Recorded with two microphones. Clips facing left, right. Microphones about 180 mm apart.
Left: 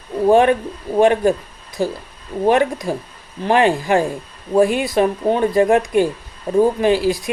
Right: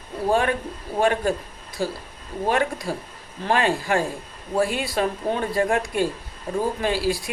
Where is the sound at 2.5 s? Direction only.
20° left (ahead or behind).